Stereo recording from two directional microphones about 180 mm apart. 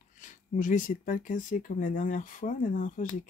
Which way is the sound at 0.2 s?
45° left (ahead or behind).